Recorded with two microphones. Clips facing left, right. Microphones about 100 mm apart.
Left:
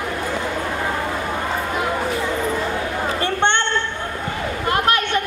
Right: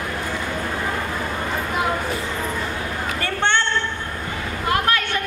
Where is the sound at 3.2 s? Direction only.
20° left (ahead or behind).